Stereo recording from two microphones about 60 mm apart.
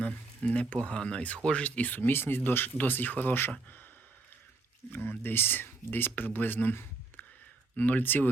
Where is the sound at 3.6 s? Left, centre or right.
Left.